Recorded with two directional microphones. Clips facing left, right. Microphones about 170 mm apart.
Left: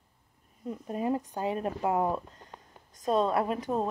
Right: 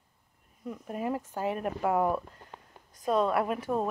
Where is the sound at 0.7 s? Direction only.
25° left (ahead or behind).